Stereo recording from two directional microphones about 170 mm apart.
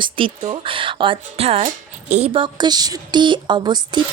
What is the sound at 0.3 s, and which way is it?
Speech, 45° right (ahead or behind).